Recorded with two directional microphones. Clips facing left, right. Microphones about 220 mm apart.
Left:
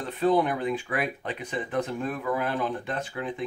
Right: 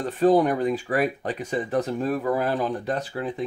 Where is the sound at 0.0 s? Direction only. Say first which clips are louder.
Right 5 dB; 45° right (ahead or behind).